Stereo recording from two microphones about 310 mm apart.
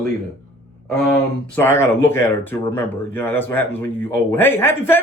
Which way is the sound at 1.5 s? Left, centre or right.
Centre.